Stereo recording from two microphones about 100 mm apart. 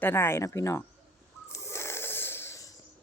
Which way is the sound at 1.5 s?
30° left (ahead or behind).